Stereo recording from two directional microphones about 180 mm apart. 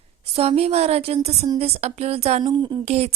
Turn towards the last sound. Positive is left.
turn(degrees=-35)  # may be behind; listen again after turning